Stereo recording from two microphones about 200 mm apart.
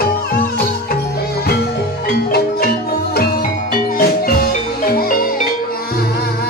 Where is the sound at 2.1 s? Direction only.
50° left (ahead or behind).